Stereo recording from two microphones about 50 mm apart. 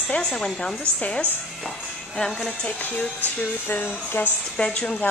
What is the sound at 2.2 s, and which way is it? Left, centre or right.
Speech, centre.